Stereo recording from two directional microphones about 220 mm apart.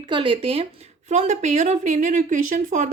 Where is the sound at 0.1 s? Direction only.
20° right (ahead or behind).